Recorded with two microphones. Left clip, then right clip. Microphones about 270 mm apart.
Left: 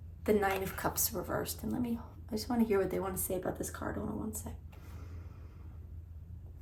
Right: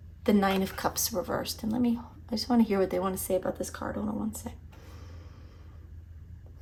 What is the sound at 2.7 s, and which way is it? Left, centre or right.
Speech, centre.